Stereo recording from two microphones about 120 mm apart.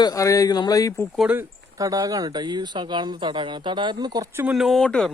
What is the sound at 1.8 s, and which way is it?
Speech, 30° right (ahead or behind).